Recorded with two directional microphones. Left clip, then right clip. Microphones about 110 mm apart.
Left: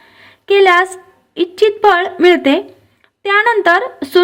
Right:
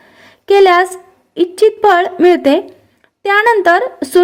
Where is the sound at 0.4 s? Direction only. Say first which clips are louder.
Right 1 dB; 25° right (ahead or behind).